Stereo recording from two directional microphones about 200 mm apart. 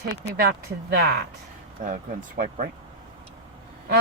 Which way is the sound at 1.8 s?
35° right (ahead or behind).